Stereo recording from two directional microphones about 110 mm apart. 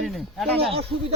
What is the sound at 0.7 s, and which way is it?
Speech, 60° right (ahead or behind).